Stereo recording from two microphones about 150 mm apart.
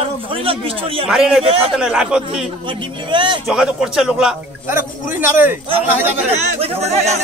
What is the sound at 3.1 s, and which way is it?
Speech, 35° right (ahead or behind).